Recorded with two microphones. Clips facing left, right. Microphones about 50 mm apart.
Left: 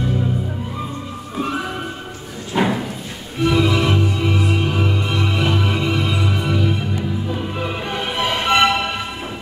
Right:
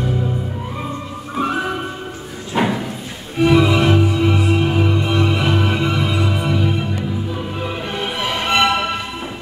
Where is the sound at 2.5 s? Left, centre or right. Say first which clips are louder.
Even; centre.